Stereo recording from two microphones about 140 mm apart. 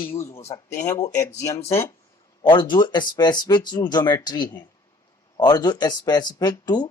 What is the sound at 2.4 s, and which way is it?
A man's voice, 35° left (ahead or behind).